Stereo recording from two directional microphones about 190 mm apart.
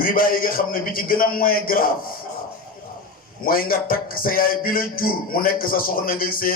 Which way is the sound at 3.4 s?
50° left (ahead or behind).